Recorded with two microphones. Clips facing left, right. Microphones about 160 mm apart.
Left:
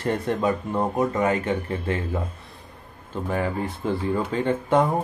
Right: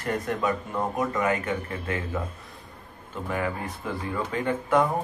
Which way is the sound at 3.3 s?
30° left (ahead or behind).